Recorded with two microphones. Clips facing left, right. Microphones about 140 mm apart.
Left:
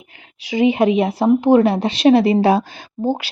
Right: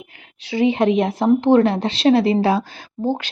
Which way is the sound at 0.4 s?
15° left (ahead or behind).